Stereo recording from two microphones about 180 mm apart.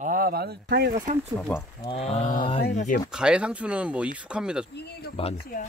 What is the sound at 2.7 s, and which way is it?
Speech, 45° left (ahead or behind).